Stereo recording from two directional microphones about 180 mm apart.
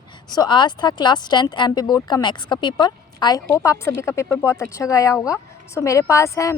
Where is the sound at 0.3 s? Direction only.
25° left (ahead or behind).